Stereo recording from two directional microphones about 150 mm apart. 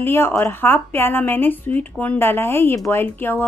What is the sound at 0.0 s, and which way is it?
Speech, 15° left (ahead or behind).